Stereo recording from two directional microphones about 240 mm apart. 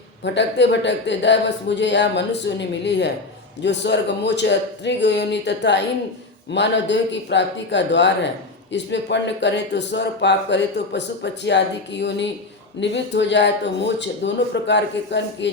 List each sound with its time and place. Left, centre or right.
0.3 s speech: left